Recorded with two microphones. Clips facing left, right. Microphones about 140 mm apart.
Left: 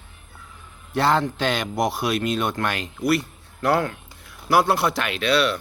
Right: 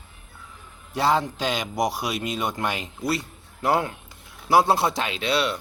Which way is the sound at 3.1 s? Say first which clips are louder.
Left 5 dB; 60° left (ahead or behind).